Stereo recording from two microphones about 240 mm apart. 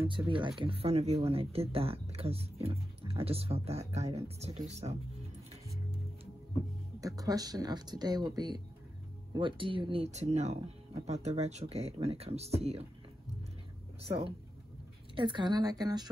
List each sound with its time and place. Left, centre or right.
0.2 s speech: centre
0.6 s speech: right
7.0 s speech: centre
14.0 s speech: right